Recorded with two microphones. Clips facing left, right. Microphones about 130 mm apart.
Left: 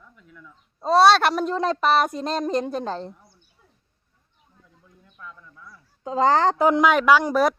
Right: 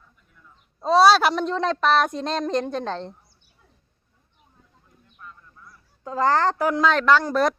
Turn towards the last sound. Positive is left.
turn(degrees=10)  # may be behind; listen again after turning